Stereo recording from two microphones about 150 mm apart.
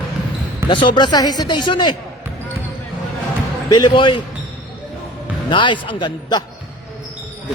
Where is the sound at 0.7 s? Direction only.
35° left (ahead or behind).